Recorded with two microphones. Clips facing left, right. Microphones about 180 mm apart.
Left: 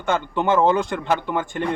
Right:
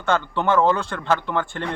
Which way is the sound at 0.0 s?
15° left (ahead or behind).